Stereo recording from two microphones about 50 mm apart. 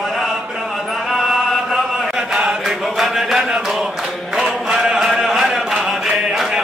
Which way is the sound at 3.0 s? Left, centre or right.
Centre.